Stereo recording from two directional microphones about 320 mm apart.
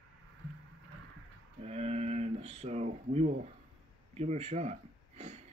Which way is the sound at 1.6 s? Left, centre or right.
Centre.